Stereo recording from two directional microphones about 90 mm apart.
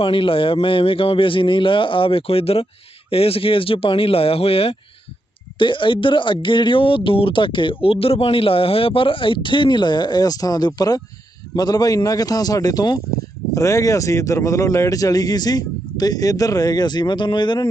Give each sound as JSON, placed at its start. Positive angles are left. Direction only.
{"t": 0.0, "sound": "a man's voice", "side_deg": 85}
{"t": 5.5, "sound": "speech", "side_deg": 65}
{"t": 13.5, "sound": "speech", "side_deg": 35}